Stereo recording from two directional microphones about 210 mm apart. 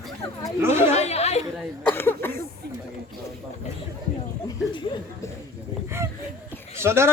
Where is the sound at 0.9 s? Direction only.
30° left (ahead or behind).